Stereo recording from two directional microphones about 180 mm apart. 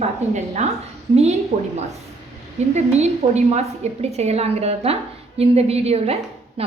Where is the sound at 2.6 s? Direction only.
35° right (ahead or behind).